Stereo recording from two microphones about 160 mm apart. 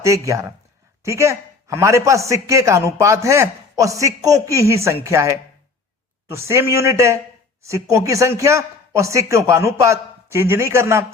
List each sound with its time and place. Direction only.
0.0 s a man's voice: 20° right (ahead or behind)